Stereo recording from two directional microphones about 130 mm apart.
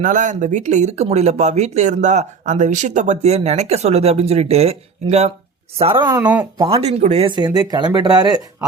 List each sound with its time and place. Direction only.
0.0 s speech: 75° right (ahead or behind); by 4.8 s 55° right (ahead or behind)
5.8 s speech: 45° right (ahead or behind)
6.1 s speech: 15° right (ahead or behind)
6.7 s speech: 50° right (ahead or behind)
7.3 s speech: 35° right (ahead or behind)